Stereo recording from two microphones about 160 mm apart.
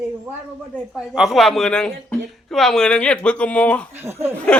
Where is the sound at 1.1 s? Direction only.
Centre (ahead or behind).